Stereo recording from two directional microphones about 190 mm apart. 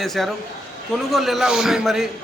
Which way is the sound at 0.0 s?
Centre (ahead or behind).